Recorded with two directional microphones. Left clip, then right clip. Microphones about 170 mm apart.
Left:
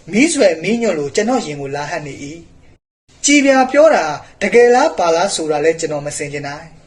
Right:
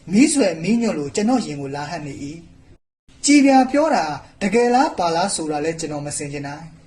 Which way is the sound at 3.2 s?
35° right (ahead or behind).